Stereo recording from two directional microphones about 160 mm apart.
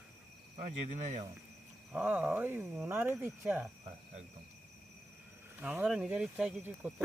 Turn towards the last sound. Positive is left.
turn(degrees=-5)  # may be behind; listen again after turning